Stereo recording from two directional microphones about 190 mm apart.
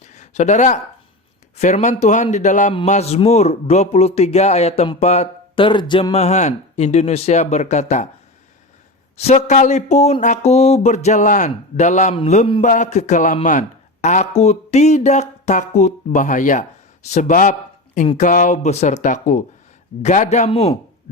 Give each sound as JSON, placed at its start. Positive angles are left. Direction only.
{"t": 0.0, "sound": "a sound", "side_deg": 35}
{"t": 1.5, "sound": "speech", "side_deg": 35}
{"t": 9.1, "sound": "speech", "side_deg": 35}